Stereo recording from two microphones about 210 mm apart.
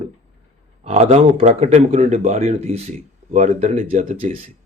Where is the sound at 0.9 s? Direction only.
30° right (ahead or behind).